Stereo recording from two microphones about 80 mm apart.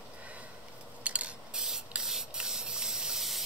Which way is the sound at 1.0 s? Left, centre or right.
Centre.